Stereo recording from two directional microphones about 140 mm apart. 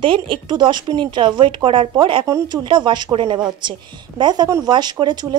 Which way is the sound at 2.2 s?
25° right (ahead or behind).